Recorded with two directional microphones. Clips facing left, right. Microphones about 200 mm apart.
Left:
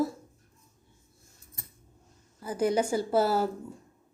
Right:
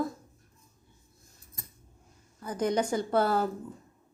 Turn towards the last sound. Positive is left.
turn(degrees=5)  # may be behind; listen again after turning